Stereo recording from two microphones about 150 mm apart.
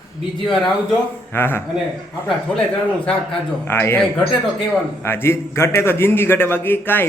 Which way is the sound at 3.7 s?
15° left (ahead or behind).